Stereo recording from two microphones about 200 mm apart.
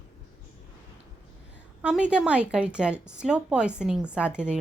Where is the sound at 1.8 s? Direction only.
5° right (ahead or behind).